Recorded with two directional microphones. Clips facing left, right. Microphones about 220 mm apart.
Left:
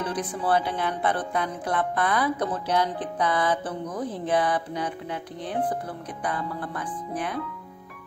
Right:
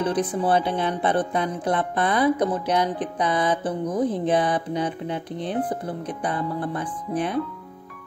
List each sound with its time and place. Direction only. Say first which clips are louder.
0.0 s speech: right 6 dB; 25° right (ahead or behind)